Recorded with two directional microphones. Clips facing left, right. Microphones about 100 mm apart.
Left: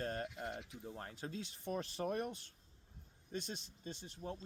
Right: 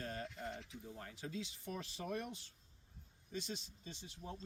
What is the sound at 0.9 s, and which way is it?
Speech, 45° left (ahead or behind).